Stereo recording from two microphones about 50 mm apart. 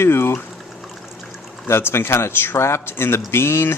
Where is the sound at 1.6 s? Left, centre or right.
Left.